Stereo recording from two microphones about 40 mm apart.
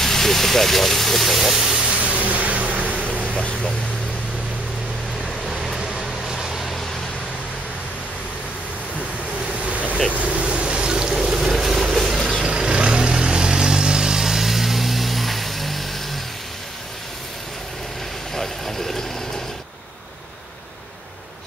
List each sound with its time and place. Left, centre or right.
0.0 s speech: centre
1.9 s a sound: right
5.2 s vehicle: centre
9.7 s vehicle: right
10.1 s boat: right; by 11.5 s centre
11.5 s vehicle: centre
18.3 s vehicle: centre